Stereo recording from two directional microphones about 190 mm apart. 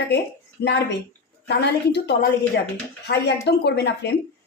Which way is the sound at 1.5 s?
65° left (ahead or behind).